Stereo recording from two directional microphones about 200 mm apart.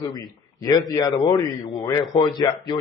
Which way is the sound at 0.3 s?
20° left (ahead or behind).